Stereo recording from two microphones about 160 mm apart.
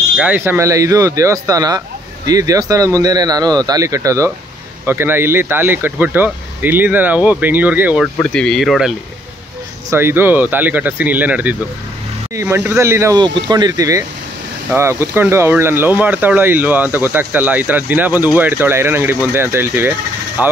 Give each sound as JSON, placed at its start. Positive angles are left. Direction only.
{"t": 0.2, "sound": "speech", "side_deg": -10}
{"t": 8.2, "sound": "speech", "side_deg": 5}
{"t": 9.8, "sound": "speech", "side_deg": -15}
{"t": 13.2, "sound": "speech", "side_deg": -30}